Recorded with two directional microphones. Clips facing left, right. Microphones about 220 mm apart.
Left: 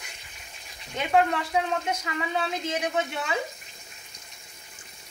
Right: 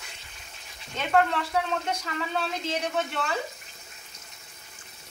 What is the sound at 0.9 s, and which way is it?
A woman's voice, 10° left (ahead or behind).